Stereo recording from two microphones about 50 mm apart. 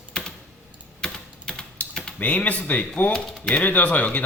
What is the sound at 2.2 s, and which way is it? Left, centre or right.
Speech, left.